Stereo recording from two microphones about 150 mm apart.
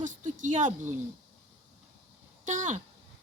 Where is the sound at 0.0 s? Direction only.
55° right (ahead or behind).